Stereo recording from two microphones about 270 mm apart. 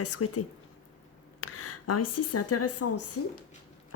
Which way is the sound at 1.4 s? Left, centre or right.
Left.